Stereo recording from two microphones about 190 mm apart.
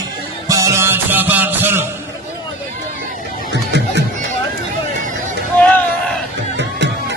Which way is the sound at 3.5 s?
65° right (ahead or behind).